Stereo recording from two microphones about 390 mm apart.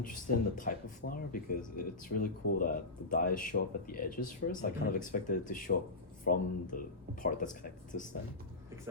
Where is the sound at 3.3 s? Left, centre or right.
Left.